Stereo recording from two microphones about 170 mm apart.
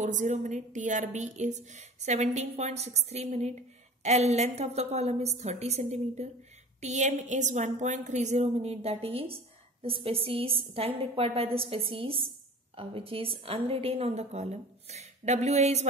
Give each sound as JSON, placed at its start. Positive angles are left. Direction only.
{"t": 0.0, "sound": "a woman's voice", "side_deg": -45}